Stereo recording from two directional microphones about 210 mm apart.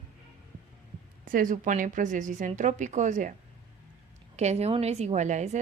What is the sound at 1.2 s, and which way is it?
A woman's voice, 40° right (ahead or behind).